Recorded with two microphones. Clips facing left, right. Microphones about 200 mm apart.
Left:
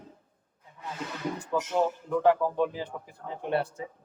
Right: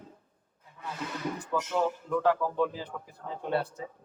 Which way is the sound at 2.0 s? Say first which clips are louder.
Left 3 dB; 20° left (ahead or behind).